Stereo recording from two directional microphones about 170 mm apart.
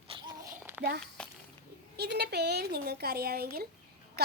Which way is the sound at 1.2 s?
5° left (ahead or behind).